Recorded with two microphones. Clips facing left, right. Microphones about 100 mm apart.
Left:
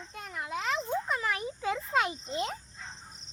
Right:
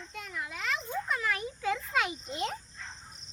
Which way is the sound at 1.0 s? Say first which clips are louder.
Left 1 dB; 25° left (ahead or behind).